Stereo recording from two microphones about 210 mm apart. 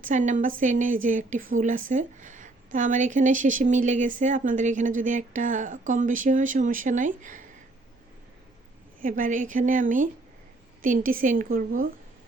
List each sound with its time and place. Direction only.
0.0 s a woman's voice: 35° right (ahead or behind)
9.0 s a woman's voice: 40° right (ahead or behind)